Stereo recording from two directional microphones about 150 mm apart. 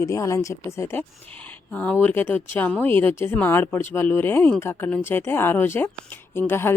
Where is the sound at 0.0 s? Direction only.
20° left (ahead or behind).